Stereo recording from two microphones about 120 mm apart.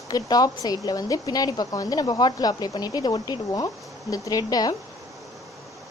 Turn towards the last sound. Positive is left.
turn(degrees=35)  # may be behind; listen again after turning